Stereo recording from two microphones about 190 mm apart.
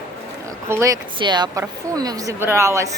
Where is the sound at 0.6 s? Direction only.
15° right (ahead or behind).